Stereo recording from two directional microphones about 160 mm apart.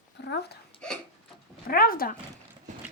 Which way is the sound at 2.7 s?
50° right (ahead or behind).